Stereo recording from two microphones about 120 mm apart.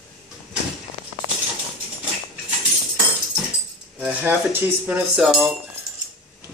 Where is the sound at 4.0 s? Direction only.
15° right (ahead or behind).